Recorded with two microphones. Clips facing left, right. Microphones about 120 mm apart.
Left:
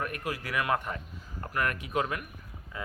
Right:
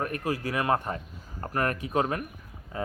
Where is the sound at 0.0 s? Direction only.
35° right (ahead or behind).